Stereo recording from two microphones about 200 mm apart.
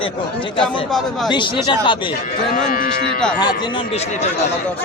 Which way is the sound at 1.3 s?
25° left (ahead or behind).